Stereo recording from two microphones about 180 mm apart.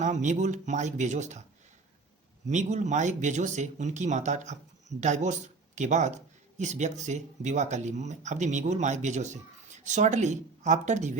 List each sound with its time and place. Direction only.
0.0 s speech: 40° right (ahead or behind)
2.5 s speech: 40° right (ahead or behind)